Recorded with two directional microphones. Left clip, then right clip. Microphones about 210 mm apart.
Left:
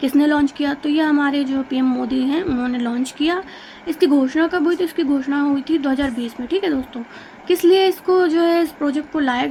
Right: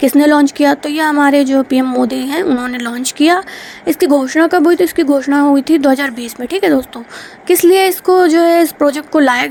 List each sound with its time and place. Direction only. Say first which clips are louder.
0.0 s speech: right 7 dB; 40° right (ahead or behind)